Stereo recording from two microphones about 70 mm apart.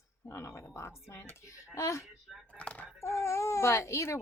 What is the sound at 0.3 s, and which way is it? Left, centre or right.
Speech, left.